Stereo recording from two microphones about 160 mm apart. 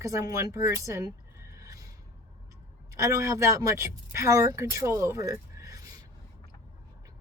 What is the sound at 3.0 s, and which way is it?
Speech, 20° right (ahead or behind).